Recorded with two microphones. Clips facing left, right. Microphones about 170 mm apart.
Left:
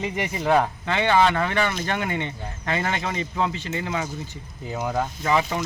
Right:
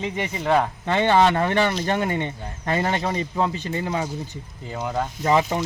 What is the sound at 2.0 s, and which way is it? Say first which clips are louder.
Speech: right 3 dB; 40° right (ahead or behind).